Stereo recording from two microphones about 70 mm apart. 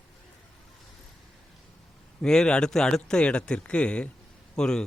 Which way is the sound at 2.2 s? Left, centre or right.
Centre.